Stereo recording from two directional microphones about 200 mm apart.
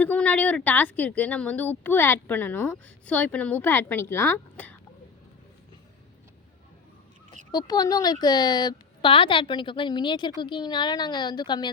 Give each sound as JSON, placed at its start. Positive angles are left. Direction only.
{"t": 0.0, "sound": "speech", "side_deg": 5}
{"t": 7.5, "sound": "a woman's voice", "side_deg": 20}